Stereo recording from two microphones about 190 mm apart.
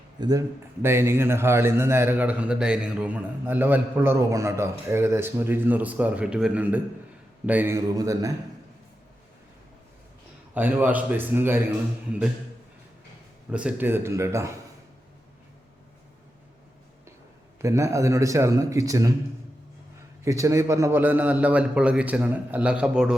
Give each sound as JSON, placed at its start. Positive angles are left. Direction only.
{"t": 0.2, "sound": "a man's voice", "side_deg": -20}
{"t": 10.5, "sound": "a man's voice", "side_deg": -10}
{"t": 13.5, "sound": "a man's voice", "side_deg": -5}
{"t": 17.6, "sound": "a man's voice", "side_deg": -15}
{"t": 20.2, "sound": "a man's voice", "side_deg": -15}